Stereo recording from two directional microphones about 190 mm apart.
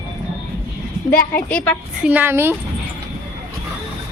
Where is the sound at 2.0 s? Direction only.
10° right (ahead or behind).